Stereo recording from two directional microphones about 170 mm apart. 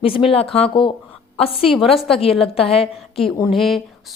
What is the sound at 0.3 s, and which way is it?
A woman's voice, 35° left (ahead or behind).